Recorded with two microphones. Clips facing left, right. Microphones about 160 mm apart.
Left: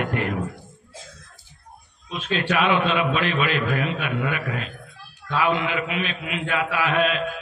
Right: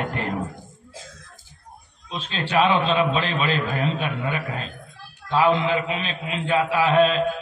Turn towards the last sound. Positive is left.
turn(degrees=-30)  # may be behind; listen again after turning